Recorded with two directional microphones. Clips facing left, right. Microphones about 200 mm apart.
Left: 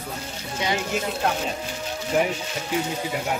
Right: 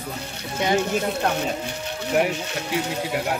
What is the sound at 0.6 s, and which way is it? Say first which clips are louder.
Speech: right 4 dB; 55° right (ahead or behind).